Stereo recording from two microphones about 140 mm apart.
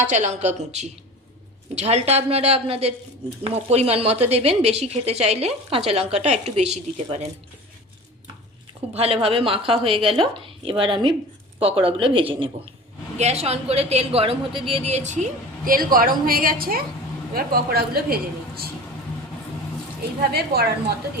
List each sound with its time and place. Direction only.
0.1 s a woman's voice: 55° right (ahead or behind)
9.0 s a woman's voice: 45° right (ahead or behind); by 18.7 s 90° right
20.3 s a woman's voice: 90° right